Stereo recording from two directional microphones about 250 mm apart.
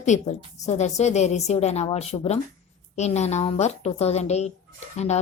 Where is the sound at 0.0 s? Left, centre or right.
Left.